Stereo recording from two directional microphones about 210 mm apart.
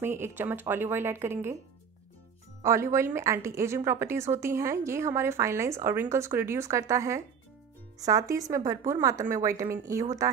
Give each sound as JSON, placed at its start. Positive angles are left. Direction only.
{"t": 0.0, "sound": "a woman's voice", "side_deg": -10}
{"t": 2.6, "sound": "a woman's voice", "side_deg": -15}